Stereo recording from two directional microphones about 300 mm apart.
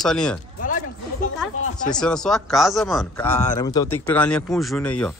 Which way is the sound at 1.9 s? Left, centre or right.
Centre.